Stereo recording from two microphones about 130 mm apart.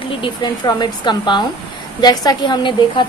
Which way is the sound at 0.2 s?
35° left (ahead or behind).